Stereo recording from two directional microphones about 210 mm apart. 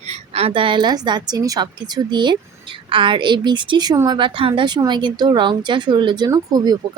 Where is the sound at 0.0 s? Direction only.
30° right (ahead or behind).